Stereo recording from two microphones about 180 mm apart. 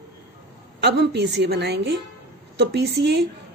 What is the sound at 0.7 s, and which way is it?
A woman's voice, 70° right (ahead or behind).